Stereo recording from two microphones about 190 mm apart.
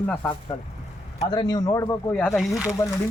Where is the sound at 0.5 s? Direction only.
20° left (ahead or behind); by 2.5 s 5° left (ahead or behind).